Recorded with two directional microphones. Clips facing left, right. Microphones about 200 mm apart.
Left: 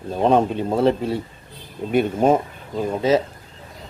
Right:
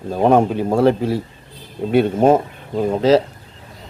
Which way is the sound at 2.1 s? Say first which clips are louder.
Right 4 dB; 5° right (ahead or behind).